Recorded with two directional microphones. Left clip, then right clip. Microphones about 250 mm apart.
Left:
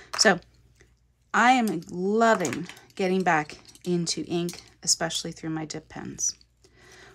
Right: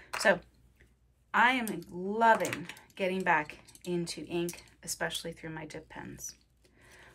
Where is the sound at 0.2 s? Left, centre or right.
Left.